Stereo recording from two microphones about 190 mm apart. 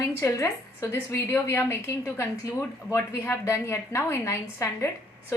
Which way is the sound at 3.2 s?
15° left (ahead or behind).